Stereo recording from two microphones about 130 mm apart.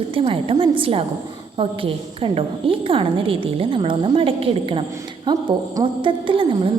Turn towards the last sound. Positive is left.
turn(degrees=-40)  # may be behind; listen again after turning